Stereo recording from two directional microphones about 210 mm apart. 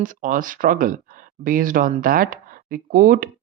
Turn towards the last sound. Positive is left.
turn(degrees=-40)  # may be behind; listen again after turning